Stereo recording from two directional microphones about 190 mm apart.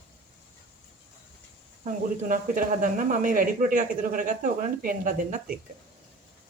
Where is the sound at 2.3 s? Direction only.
45° right (ahead or behind).